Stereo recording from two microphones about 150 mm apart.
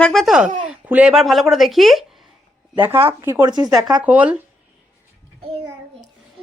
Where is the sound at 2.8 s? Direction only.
15° right (ahead or behind).